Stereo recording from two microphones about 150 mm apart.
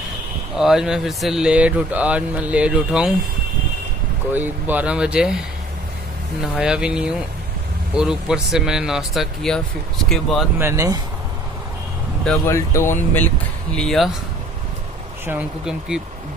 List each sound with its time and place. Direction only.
0.6 s speech: 5° right (ahead or behind)
4.3 s speech: 10° right (ahead or behind)
6.4 s speech: 5° right (ahead or behind)
10.6 s speech: 20° right (ahead or behind)
12.4 s speech: 15° left (ahead or behind)
13.7 s speech: centre (ahead or behind)
15.2 s speech: 5° right (ahead or behind)